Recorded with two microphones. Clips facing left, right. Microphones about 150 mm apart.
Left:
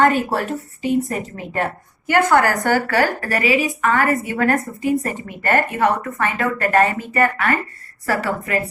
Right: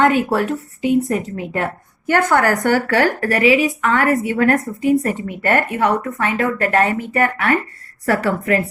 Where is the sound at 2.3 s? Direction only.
55° right (ahead or behind).